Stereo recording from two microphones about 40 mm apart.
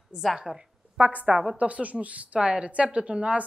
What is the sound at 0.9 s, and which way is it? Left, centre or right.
A woman's voice, right.